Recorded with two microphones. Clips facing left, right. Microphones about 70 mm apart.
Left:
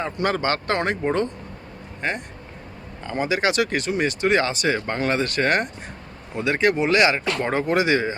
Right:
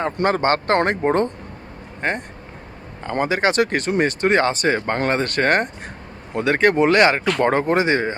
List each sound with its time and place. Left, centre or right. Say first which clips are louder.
0.0 s speech: right 4 dB; right